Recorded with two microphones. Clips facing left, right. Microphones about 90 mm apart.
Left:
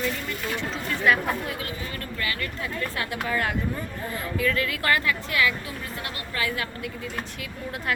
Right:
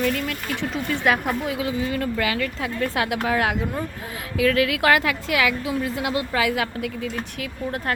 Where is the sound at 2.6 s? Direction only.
90° right.